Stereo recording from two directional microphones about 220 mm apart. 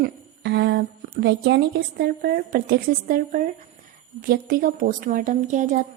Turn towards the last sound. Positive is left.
turn(degrees=-35)  # may be behind; listen again after turning